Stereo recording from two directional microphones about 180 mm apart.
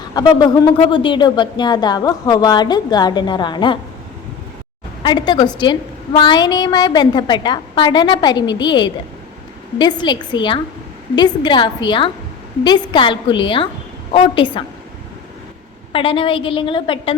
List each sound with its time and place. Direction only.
0.1 s speech: 20° left (ahead or behind)
5.0 s speech: 25° left (ahead or behind)
15.9 s speech: 30° left (ahead or behind)